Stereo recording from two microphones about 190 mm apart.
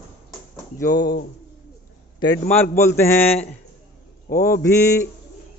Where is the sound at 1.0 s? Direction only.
65° left (ahead or behind).